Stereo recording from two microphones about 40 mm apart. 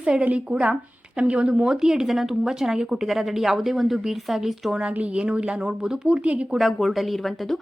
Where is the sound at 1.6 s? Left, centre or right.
Centre.